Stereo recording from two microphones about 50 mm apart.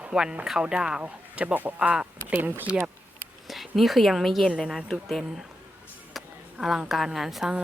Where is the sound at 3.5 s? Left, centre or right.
Centre.